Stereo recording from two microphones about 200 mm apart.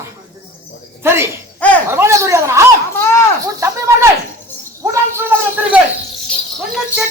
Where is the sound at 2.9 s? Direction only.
15° left (ahead or behind).